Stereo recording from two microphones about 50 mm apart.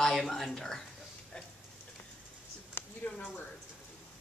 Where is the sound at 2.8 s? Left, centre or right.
Left.